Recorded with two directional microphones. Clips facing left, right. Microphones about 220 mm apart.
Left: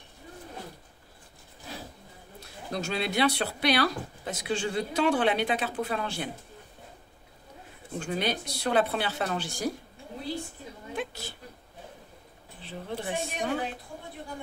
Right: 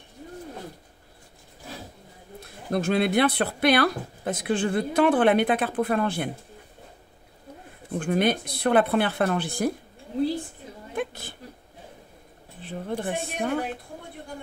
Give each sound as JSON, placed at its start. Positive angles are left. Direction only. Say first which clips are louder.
{"t": 2.4, "sound": "speech", "louder": "right 8 dB", "side_deg": -55}
{"t": 8.0, "sound": "speech", "louder": "right 7 dB", "side_deg": -55}
{"t": 11.0, "sound": "a sound", "louder": "right 5 dB", "side_deg": -55}
{"t": 12.6, "sound": "speech", "louder": "right 5 dB", "side_deg": -50}